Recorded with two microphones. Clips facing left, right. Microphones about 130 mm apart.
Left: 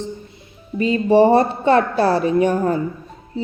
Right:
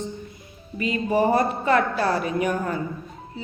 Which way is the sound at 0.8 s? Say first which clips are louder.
Left 8 dB; 30° left (ahead or behind).